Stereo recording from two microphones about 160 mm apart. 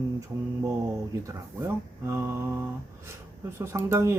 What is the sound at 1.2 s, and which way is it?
Speech, 15° right (ahead or behind).